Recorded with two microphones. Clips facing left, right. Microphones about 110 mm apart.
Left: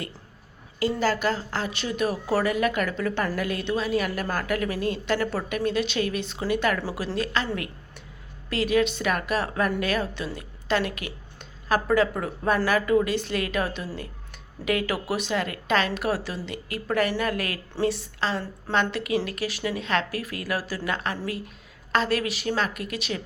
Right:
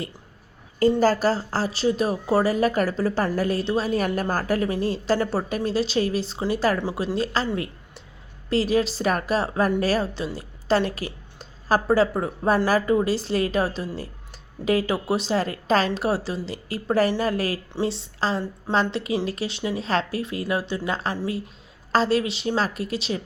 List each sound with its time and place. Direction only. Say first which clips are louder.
0.8 s a woman's voice: right 5 dB; 40° right (ahead or behind)